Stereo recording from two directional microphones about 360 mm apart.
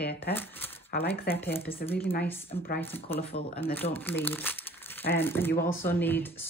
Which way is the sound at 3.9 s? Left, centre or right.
Centre.